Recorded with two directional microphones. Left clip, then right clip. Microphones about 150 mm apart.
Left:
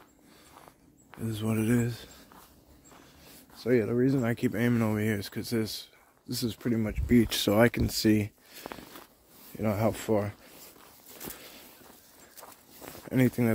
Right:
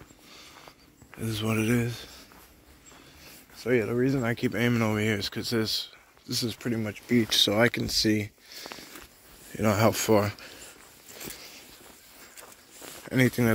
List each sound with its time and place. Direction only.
1.2 s speech: 15° left (ahead or behind)
1.8 s speech: 35° left (ahead or behind)
3.3 s speech: 35° left (ahead or behind)
4.5 s speech: 20° left (ahead or behind)
6.4 s speech: 45° left (ahead or behind)
9.6 s speech: 15° right (ahead or behind)
13.1 s speech: 10° left (ahead or behind)